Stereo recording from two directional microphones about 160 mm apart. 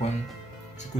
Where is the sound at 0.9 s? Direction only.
45° left (ahead or behind).